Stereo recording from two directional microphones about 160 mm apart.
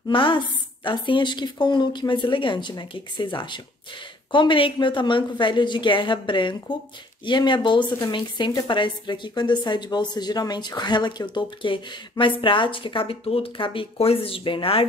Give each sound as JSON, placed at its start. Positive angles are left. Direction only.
{"t": 0.1, "sound": "a woman's voice", "side_deg": 30}